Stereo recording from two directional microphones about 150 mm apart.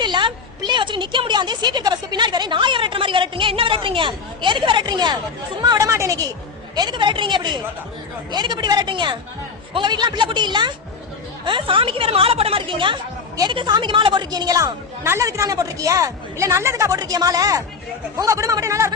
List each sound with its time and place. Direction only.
0.0 s a woman's voice: 30° right (ahead or behind)